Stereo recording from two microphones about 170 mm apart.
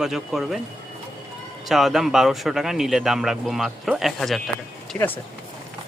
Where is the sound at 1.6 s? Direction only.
Centre (ahead or behind).